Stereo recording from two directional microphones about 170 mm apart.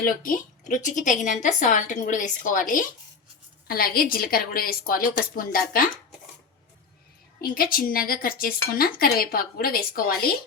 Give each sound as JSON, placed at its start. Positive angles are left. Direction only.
{"t": 0.0, "sound": "speech", "side_deg": 55}
{"t": 3.7, "sound": "a woman's voice", "side_deg": 60}
{"t": 7.4, "sound": "a woman's voice", "side_deg": 60}